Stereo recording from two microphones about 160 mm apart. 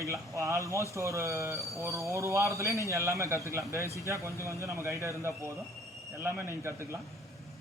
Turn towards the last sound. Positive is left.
turn(degrees=-15)  # may be behind; listen again after turning